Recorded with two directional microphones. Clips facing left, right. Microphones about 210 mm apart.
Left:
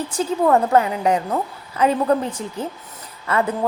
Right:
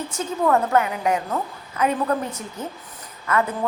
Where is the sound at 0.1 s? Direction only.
30° left (ahead or behind).